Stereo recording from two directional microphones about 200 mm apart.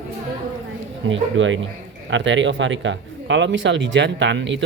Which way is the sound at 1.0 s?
70° right (ahead or behind).